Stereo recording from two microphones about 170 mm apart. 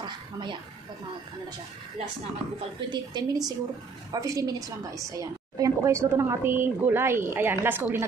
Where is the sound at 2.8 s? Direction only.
25° right (ahead or behind).